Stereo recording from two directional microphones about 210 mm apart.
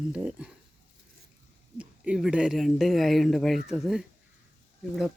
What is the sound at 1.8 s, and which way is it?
Speech, 5° right (ahead or behind).